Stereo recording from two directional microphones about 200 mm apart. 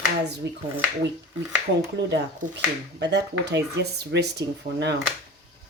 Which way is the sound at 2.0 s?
60° right (ahead or behind).